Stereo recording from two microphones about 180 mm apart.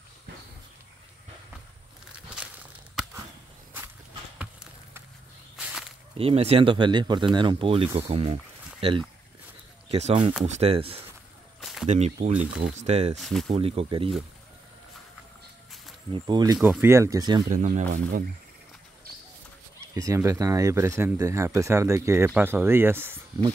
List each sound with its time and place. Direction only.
4.4 s a sound: 5° right (ahead or behind)
5.6 s whip: 5° right (ahead or behind)
6.1 s speech: 35° right (ahead or behind)
9.8 s speech: 35° right (ahead or behind)
11.6 s a sound: centre (ahead or behind)
11.9 s speech: 40° right (ahead or behind)
12.4 s speech: 5° right (ahead or behind)
12.7 s speech: 35° right (ahead or behind)
13.2 s speech: centre (ahead or behind)
13.5 s speech: 30° right (ahead or behind)
16.1 s speech: 25° right (ahead or behind)
16.5 s speech: 5° right (ahead or behind)
17.5 s speech: 40° right (ahead or behind)
19.9 s speech: 15° right (ahead or behind)